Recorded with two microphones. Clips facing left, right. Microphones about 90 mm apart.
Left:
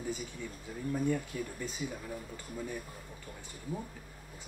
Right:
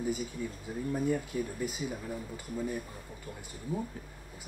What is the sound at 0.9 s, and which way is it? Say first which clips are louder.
Speech: right 1 dB; 10° right (ahead or behind).